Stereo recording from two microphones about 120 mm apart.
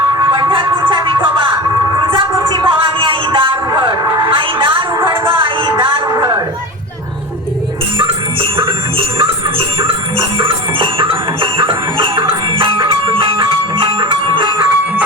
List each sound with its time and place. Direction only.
0.2 s music: 40° right (ahead or behind)
2.5 s a sound: 45° right (ahead or behind)
5.3 s music: 45° right (ahead or behind)
8.0 s jingle bell: 50° right (ahead or behind)